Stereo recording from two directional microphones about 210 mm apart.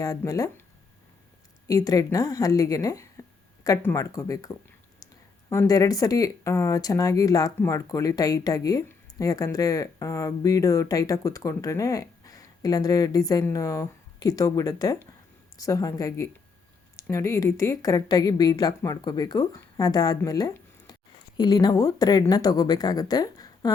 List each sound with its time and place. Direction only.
0.0 s speech: 15° left (ahead or behind)
1.6 s speech: 15° left (ahead or behind)